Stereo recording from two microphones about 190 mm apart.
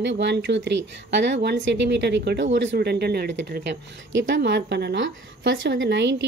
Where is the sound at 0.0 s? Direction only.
70° right (ahead or behind).